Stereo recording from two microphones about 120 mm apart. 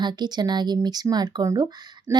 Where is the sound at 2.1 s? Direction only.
25° right (ahead or behind).